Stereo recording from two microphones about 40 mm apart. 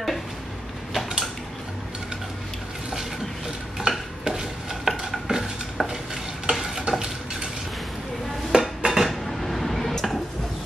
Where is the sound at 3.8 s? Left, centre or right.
Centre.